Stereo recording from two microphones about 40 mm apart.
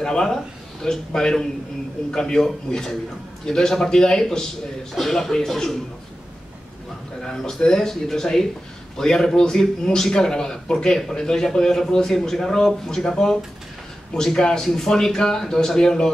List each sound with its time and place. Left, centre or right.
0.0 s a man's voice: centre
7.2 s a man's voice: centre